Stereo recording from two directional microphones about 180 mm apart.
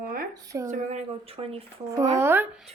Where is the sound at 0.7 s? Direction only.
40° right (ahead or behind).